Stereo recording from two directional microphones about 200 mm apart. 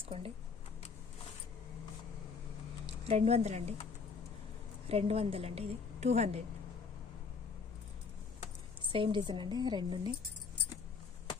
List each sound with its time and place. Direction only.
0.0 s speech: 30° right (ahead or behind)
3.1 s a woman's voice: 30° right (ahead or behind)
4.8 s a woman's voice: 30° right (ahead or behind)
8.8 s a woman's voice: 25° right (ahead or behind)